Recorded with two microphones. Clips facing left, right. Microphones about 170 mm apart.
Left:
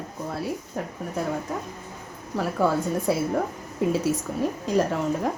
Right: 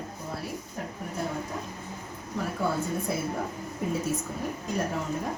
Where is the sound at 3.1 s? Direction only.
90° left.